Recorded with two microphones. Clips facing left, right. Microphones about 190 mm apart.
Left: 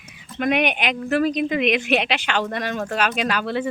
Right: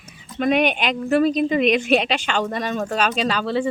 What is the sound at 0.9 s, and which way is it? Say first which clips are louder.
A woman's voice: right 4 dB; 40° right (ahead or behind).